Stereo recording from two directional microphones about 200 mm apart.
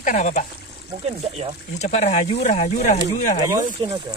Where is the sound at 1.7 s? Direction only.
35° left (ahead or behind).